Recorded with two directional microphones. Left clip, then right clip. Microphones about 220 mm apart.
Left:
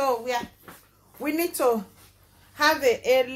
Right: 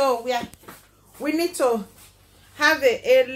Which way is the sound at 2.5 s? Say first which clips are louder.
Right 2 dB; 25° left (ahead or behind).